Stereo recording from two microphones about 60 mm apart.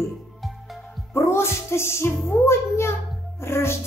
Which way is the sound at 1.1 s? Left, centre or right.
Left.